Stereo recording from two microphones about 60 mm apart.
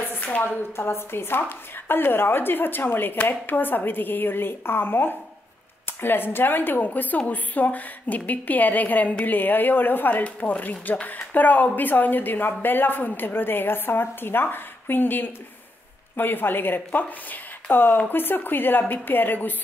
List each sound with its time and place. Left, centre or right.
0.1 s a woman's voice: left